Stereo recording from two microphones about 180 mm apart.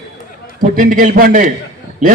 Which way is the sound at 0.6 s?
50° right (ahead or behind).